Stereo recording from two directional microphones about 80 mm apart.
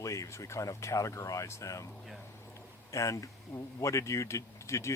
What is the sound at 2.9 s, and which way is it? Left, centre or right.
Speech, left.